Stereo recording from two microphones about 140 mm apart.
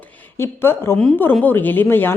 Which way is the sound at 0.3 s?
15° left (ahead or behind).